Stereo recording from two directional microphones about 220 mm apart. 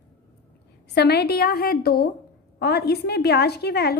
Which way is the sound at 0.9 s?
45° left (ahead or behind).